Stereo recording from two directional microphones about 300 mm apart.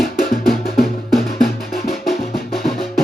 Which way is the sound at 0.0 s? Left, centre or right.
Left.